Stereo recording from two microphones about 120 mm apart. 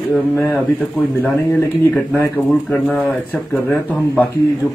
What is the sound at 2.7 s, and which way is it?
Speech, 10° left (ahead or behind).